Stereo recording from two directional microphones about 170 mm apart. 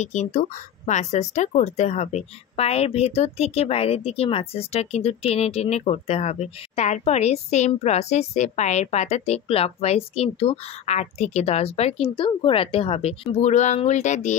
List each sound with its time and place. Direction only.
0.0 s speech: 45° left (ahead or behind)